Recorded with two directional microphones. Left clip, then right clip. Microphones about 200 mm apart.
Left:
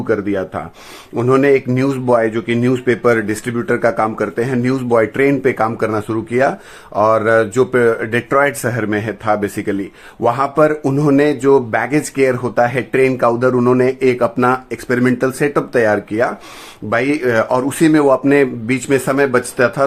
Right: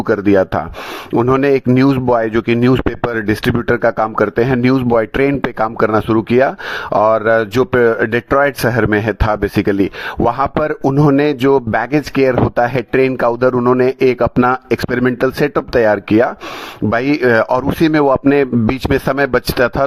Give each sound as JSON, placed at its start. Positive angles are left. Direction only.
{"t": 0.1, "sound": "speech", "side_deg": -50}